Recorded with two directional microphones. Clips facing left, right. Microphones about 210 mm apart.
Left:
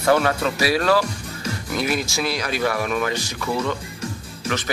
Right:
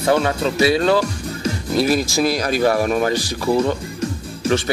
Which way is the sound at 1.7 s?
35° right (ahead or behind).